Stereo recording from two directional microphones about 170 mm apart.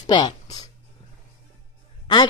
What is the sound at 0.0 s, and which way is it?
Speech, 25° left (ahead or behind).